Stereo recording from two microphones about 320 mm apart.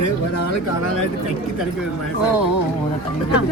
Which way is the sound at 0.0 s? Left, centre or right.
Left.